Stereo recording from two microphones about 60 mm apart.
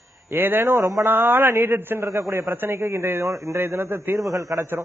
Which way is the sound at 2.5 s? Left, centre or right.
Right.